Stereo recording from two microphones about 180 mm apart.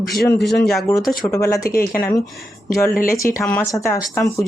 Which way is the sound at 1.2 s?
20° left (ahead or behind).